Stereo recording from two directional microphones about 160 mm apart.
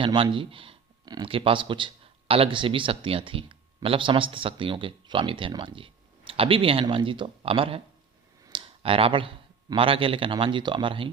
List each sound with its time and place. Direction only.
0.0 s speech: 30° right (ahead or behind)